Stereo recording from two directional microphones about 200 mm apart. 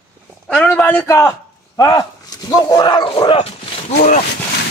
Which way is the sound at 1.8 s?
20° left (ahead or behind).